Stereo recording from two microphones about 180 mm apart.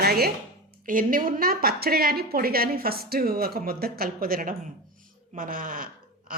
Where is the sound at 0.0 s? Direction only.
60° right (ahead or behind).